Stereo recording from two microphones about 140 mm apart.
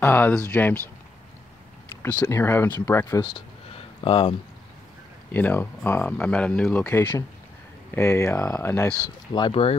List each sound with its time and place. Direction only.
0.0 s speech: 15° left (ahead or behind)
2.0 s speech: 15° left (ahead or behind)
3.7 s a sound: 40° left (ahead or behind)
5.3 s speech: 15° left (ahead or behind)
9.3 s speech: 40° left (ahead or behind)